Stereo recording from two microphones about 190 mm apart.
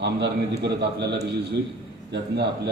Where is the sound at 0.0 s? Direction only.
60° right (ahead or behind).